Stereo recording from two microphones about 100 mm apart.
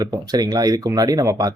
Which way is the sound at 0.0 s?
40° right (ahead or behind).